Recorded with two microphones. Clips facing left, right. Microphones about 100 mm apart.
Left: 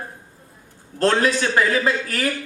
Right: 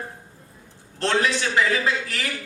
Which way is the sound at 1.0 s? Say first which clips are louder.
Left 4 dB; 45° left (ahead or behind).